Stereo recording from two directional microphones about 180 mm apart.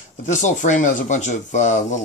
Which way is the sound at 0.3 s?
45° left (ahead or behind).